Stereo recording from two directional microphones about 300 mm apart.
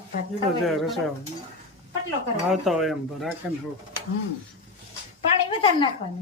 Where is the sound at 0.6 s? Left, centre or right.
Centre.